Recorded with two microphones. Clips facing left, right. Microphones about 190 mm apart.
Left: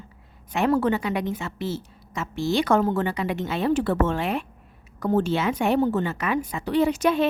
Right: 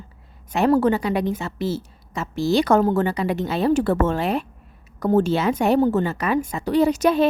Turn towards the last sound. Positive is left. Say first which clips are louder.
# right 3 dB
turn(degrees=-40)  # may be behind; listen again after turning